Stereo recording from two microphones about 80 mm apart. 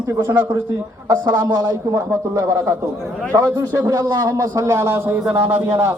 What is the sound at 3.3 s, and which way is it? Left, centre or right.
A man's voice, right.